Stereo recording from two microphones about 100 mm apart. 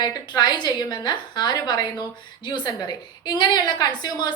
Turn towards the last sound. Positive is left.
turn(degrees=45)  # may be behind; listen again after turning